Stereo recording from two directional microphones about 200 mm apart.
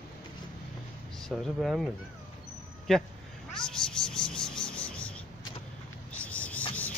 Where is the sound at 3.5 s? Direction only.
5° left (ahead or behind).